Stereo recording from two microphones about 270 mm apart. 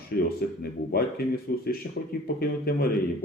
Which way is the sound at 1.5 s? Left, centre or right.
Left.